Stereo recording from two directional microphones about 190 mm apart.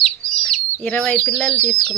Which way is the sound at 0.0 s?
5° left (ahead or behind).